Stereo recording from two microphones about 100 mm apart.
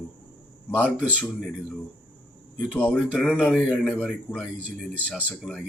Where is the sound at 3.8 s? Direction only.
15° left (ahead or behind).